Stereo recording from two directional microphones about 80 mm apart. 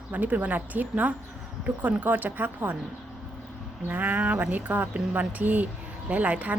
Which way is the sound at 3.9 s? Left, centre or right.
Right.